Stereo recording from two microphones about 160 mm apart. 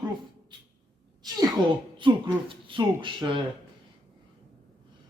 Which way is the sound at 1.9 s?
30° right (ahead or behind).